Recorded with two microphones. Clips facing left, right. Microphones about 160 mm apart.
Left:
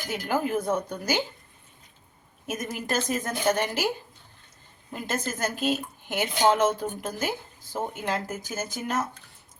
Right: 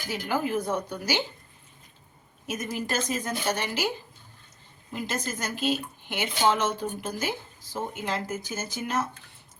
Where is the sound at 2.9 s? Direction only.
50° left (ahead or behind).